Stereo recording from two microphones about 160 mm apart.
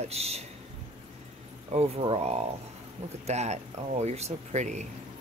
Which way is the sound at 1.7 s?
40° right (ahead or behind).